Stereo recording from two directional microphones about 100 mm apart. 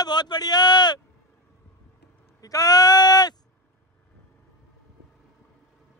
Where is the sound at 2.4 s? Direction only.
40° left (ahead or behind).